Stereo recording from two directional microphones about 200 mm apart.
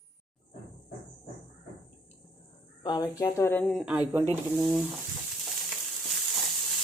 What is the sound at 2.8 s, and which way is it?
Speech, 20° left (ahead or behind).